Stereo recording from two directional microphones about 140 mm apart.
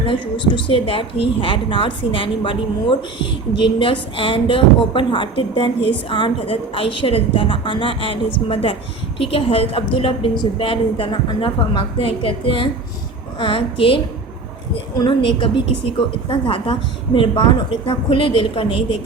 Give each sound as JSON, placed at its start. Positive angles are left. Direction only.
{"t": 0.0, "sound": "a woman's voice", "side_deg": 35}